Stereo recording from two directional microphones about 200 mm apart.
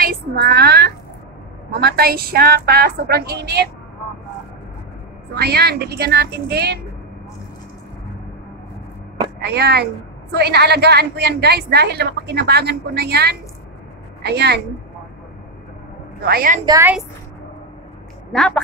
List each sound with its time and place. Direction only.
0.0 s a sound: 50° right (ahead or behind)
1.8 s a woman's voice: 50° right (ahead or behind)
5.3 s a woman's voice: 50° right (ahead or behind)
9.4 s a woman's voice: 55° right (ahead or behind)
16.2 s a woman's voice: 50° right (ahead or behind)
16.6 s a woman's voice: 15° right (ahead or behind)
18.3 s a woman's voice: 5° left (ahead or behind)